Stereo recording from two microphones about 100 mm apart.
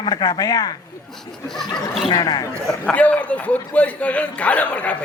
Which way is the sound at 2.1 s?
40° left (ahead or behind).